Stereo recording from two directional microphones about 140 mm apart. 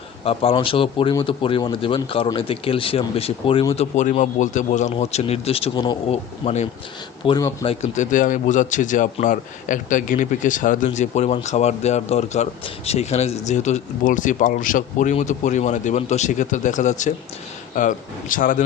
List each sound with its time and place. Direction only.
0.5 s speech: 40° left (ahead or behind)
3.9 s speech: 55° left (ahead or behind); by 6.1 s 35° left (ahead or behind)
6.4 s speech: 55° left (ahead or behind)
7.2 s speech: 40° left (ahead or behind)
7.9 s a man's voice: 65° left (ahead or behind)
17.7 s a man's voice: 70° left (ahead or behind)